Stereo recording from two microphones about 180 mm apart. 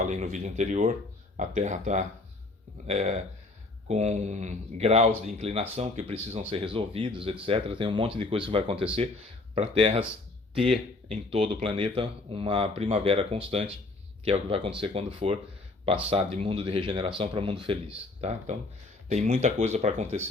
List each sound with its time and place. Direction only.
0.0 s speech: 40° right (ahead or behind)
11.1 s speech: 35° right (ahead or behind)